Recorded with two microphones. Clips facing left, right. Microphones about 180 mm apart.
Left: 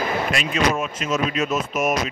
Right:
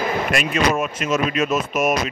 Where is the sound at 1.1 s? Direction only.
70° right (ahead or behind).